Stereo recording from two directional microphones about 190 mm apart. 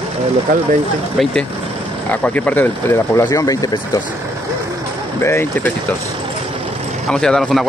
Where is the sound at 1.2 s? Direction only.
Centre (ahead or behind); by 4.0 s 20° left (ahead or behind).